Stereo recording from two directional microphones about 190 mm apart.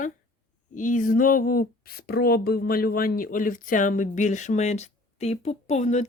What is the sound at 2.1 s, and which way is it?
Speech, 55° left (ahead or behind).